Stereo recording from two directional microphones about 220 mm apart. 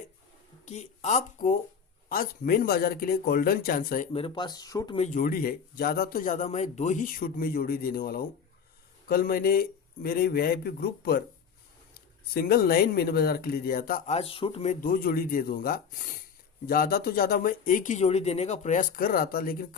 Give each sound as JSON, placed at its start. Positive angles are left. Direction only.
{"t": 0.6, "sound": "speech", "side_deg": 30}
{"t": 4.1, "sound": "speech", "side_deg": 25}
{"t": 4.9, "sound": "speech", "side_deg": 35}
{"t": 12.3, "sound": "speech", "side_deg": 45}